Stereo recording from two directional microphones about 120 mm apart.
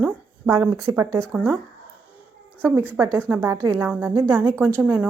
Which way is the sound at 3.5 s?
35° right (ahead or behind).